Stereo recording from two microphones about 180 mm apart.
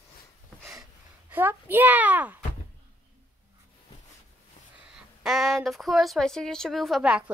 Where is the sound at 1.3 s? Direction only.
10° right (ahead or behind).